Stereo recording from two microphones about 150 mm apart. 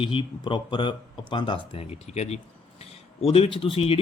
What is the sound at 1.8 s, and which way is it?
Speech, 45° left (ahead or behind).